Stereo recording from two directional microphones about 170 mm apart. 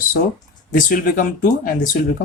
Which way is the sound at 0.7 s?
55° left (ahead or behind).